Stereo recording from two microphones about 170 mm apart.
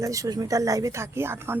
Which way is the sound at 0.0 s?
20° right (ahead or behind).